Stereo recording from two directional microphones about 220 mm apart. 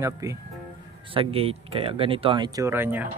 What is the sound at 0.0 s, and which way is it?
Speech, 15° right (ahead or behind).